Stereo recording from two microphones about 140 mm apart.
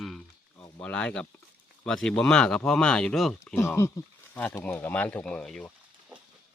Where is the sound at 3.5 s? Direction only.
15° left (ahead or behind).